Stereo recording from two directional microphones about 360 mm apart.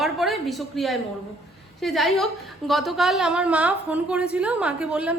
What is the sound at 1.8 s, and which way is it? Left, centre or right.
A woman's voice, centre.